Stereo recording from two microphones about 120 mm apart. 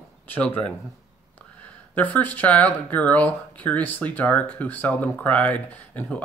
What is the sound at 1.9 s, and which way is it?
Speech, 15° left (ahead or behind).